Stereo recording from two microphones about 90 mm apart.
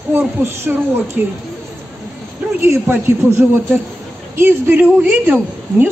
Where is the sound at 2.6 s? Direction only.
30° right (ahead or behind).